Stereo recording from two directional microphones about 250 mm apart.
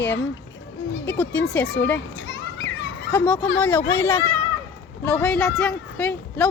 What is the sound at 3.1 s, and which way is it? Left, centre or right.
Speech, centre.